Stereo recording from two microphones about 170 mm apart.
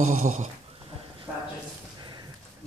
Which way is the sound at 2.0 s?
25° right (ahead or behind).